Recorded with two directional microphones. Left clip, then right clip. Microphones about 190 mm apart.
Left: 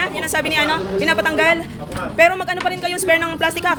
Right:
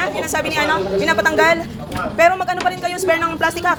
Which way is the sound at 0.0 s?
20° left (ahead or behind).